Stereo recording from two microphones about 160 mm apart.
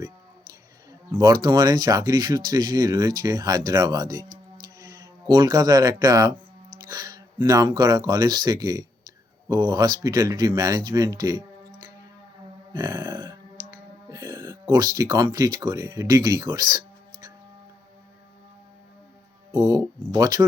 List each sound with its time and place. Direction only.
1.1 s speech: 20° right (ahead or behind)
12.7 s a sound: 25° right (ahead or behind)
13.7 s speech: 20° right (ahead or behind)
19.5 s speech: 15° right (ahead or behind)